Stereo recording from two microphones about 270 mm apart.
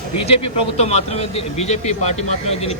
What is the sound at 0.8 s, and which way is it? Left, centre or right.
Speech, left.